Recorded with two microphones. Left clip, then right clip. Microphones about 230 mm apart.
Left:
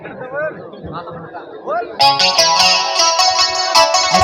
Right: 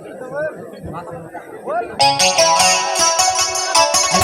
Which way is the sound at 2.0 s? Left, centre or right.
Right.